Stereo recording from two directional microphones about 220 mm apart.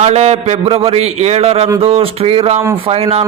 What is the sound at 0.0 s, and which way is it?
A man's voice, 30° right (ahead or behind).